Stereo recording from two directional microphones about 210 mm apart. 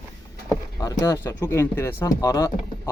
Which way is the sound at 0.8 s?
15° left (ahead or behind).